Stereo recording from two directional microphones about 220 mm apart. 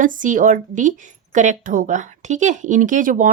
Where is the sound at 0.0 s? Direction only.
35° right (ahead or behind).